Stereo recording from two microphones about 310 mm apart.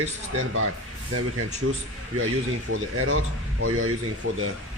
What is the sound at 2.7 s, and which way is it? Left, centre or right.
Speech, right.